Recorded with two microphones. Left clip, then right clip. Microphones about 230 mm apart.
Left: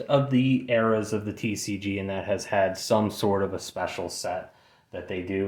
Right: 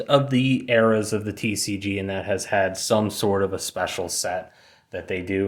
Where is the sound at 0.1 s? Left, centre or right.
Right.